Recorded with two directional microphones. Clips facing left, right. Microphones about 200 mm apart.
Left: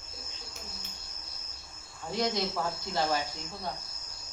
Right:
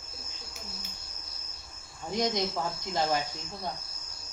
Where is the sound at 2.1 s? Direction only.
15° right (ahead or behind).